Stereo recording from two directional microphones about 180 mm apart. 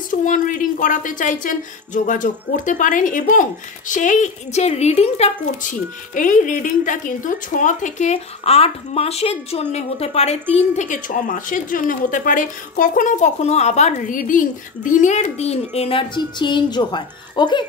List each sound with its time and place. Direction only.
0.1 s a woman's voice: 50° left (ahead or behind); by 17.6 s 25° left (ahead or behind)